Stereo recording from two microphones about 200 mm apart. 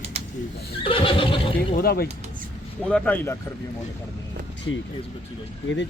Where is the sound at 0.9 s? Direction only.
25° left (ahead or behind).